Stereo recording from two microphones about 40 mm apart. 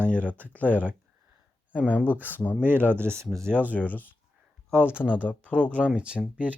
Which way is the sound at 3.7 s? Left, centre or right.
Left.